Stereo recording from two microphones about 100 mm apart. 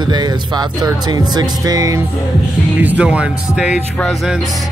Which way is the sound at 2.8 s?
15° right (ahead or behind).